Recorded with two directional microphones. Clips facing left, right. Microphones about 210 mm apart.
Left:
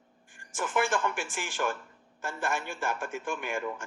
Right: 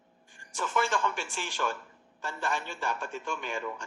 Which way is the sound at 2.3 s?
15° left (ahead or behind).